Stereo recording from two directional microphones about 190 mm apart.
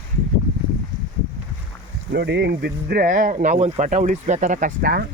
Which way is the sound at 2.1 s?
65° right (ahead or behind).